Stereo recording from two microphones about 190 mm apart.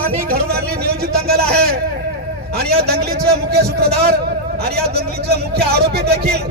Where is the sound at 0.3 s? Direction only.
55° right (ahead or behind).